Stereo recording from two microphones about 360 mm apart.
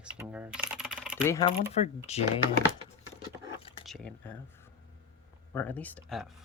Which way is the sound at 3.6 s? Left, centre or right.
Centre.